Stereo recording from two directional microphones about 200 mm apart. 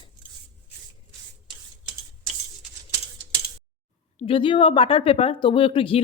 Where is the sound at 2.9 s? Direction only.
20° right (ahead or behind).